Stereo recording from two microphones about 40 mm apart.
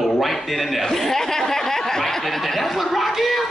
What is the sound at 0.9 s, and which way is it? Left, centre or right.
A man's voice, centre.